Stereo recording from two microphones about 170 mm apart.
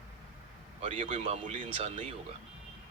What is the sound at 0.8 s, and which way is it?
Speech, 35° right (ahead or behind).